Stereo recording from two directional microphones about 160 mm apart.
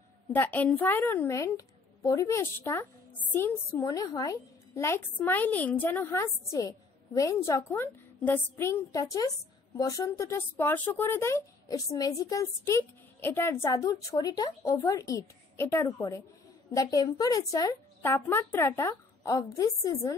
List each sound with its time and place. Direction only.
0.3 s a woman's voice: 10° left (ahead or behind)